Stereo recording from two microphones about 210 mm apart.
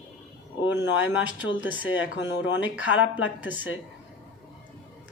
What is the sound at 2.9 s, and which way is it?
Speech, 5° right (ahead or behind).